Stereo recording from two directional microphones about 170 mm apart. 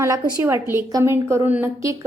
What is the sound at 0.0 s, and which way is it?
A woman's voice, 15° right (ahead or behind).